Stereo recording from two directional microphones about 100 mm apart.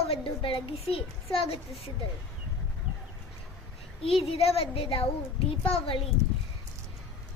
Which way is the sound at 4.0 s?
70° left (ahead or behind).